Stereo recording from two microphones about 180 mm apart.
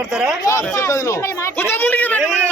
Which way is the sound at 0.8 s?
15° left (ahead or behind).